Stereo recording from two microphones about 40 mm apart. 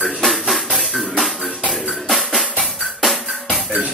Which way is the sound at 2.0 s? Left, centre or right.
Centre.